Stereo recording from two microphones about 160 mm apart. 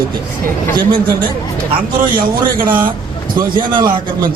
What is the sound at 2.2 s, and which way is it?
A man's voice, 60° right (ahead or behind).